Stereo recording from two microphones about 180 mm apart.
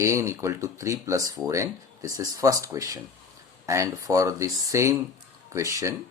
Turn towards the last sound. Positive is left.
turn(degrees=-15)  # may be behind; listen again after turning